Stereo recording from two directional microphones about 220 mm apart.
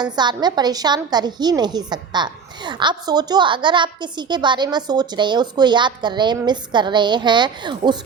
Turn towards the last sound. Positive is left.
turn(degrees=-20)  # may be behind; listen again after turning